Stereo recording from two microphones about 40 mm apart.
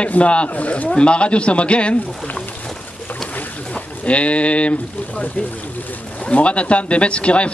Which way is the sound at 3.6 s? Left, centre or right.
Left.